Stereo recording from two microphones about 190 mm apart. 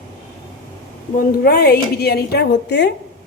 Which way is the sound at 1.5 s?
60° left (ahead or behind).